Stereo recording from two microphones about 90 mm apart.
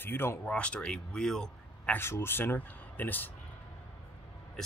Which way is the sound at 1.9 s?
25° left (ahead or behind).